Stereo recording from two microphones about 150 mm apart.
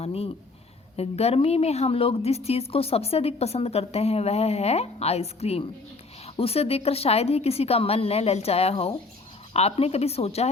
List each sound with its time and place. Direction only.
0.0 s a woman's voice: 40° left (ahead or behind)